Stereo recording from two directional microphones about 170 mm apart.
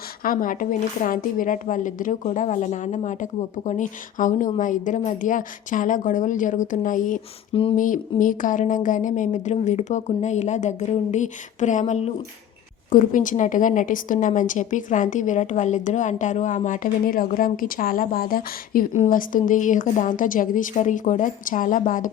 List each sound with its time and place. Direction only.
0.2 s a woman's voice: 55° left (ahead or behind)
7.5 s a sound: 35° left (ahead or behind)
7.8 s a woman's voice: 50° left (ahead or behind)